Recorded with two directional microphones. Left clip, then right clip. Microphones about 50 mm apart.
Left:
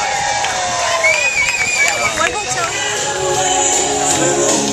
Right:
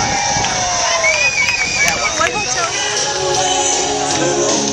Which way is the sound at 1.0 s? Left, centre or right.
Centre.